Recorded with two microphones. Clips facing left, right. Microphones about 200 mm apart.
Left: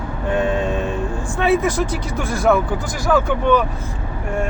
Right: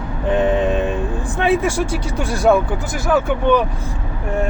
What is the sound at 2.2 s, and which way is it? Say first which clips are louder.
Speech: right 2 dB; 15° right (ahead or behind).